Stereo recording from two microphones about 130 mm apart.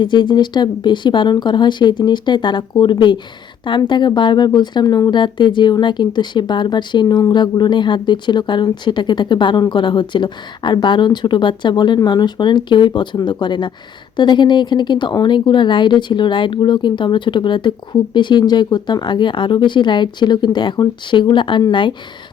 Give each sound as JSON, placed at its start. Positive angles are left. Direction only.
{"t": 0.0, "sound": "speech", "side_deg": 35}